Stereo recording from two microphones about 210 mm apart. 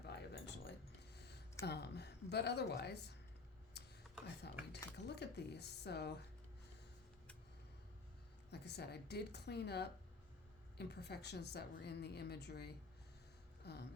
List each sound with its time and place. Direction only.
0.0 s keys jangling: 50° left (ahead or behind)
1.1 s a sound: 50° left (ahead or behind)
1.6 s a woman's voice: 50° left (ahead or behind)
3.8 s a sound: 50° left (ahead or behind)
4.4 s a woman's voice: 55° left (ahead or behind)
8.4 s a woman's voice: 50° left (ahead or behind)